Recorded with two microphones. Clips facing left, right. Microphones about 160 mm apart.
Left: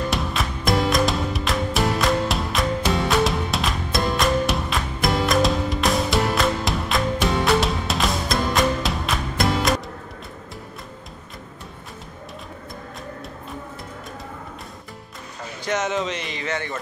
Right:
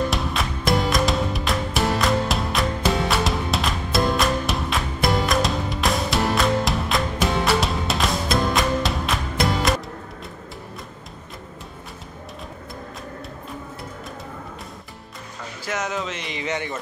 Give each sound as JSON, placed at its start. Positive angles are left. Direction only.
{"t": 0.1, "sound": "music", "side_deg": 0}
{"t": 15.6, "sound": "a sound", "side_deg": -5}
{"t": 16.3, "sound": "speech", "side_deg": -20}